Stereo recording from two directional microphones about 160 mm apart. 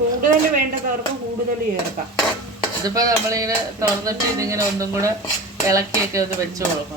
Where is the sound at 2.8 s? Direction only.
25° right (ahead or behind).